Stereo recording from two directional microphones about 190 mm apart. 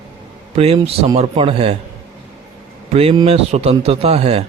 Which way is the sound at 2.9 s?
30° right (ahead or behind).